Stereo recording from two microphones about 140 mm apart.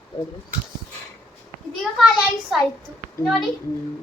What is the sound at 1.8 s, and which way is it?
Speech, centre (ahead or behind).